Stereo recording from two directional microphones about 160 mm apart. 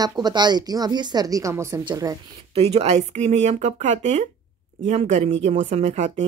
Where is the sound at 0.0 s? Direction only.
25° right (ahead or behind).